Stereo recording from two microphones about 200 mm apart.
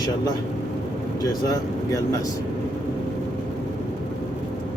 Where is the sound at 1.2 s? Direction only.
20° left (ahead or behind).